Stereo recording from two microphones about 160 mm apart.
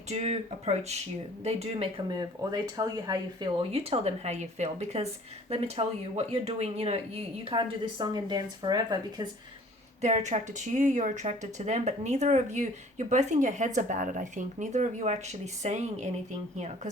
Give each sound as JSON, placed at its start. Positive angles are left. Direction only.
{"t": 0.1, "sound": "speech", "side_deg": -45}
{"t": 3.6, "sound": "speech", "side_deg": -40}
{"t": 10.0, "sound": "speech", "side_deg": -45}